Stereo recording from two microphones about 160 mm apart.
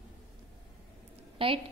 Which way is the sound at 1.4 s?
35° right (ahead or behind).